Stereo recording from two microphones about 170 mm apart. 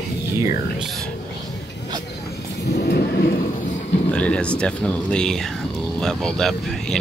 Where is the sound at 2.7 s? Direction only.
75° left (ahead or behind).